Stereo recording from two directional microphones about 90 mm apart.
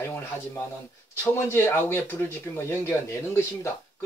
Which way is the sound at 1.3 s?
25° left (ahead or behind).